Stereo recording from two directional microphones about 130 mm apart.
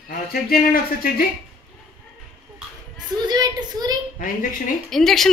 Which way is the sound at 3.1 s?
30° right (ahead or behind).